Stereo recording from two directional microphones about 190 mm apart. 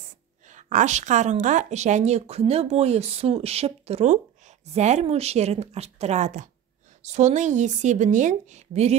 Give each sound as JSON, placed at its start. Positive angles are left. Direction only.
{"t": 0.6, "sound": "speech", "side_deg": -40}